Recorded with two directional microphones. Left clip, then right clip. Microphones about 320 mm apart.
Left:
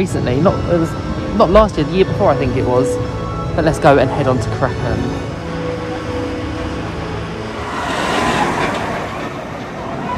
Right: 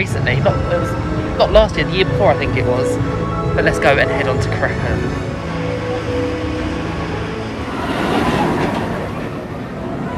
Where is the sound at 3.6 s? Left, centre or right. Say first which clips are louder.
Left 3 dB; centre.